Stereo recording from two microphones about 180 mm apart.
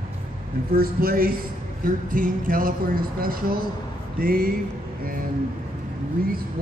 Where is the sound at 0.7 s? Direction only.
55° right (ahead or behind).